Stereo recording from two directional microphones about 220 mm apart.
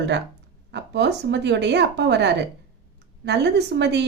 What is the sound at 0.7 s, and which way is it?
A woman's voice, 50° right (ahead or behind).